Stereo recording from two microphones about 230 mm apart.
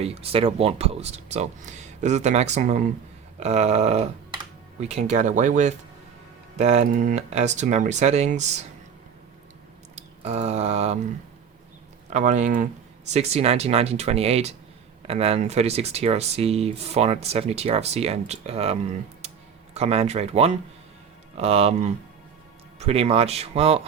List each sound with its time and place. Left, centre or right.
0.0 s speech: right
9.9 s speech: right
12.1 s speech: right
19.2 s a sound: right
19.7 s speech: right